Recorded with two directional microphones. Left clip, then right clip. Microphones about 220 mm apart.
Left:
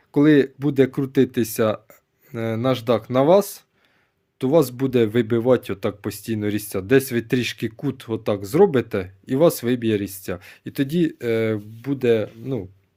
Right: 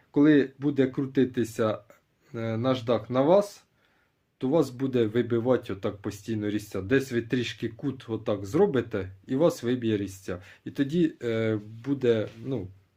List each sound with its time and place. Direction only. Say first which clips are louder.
0.1 s speech: left 5 dB; 50° left (ahead or behind)